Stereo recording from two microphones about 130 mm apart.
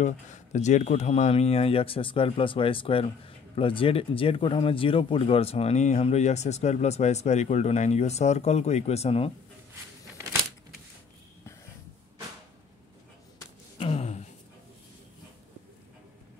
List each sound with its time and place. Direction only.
0.0 s speech: 65° left (ahead or behind)
13.7 s gasp: 50° left (ahead or behind)